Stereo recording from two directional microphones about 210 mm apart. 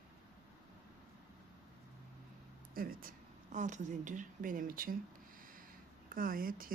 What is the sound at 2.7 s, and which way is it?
A woman's voice, 45° right (ahead or behind).